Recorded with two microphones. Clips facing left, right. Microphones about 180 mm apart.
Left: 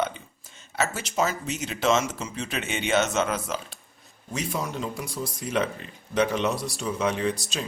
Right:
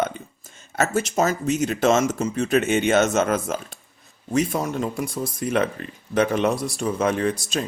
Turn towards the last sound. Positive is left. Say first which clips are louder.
# right 4 dB
turn(degrees=-50)  # may be behind; listen again after turning